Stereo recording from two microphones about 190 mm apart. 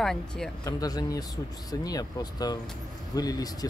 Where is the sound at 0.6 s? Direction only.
20° left (ahead or behind).